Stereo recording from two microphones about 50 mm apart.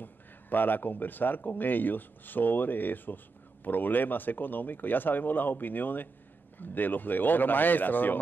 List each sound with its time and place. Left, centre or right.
0.0 s speech: left